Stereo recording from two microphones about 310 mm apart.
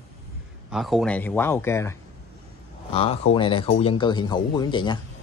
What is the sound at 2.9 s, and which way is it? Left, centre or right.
Speech, centre.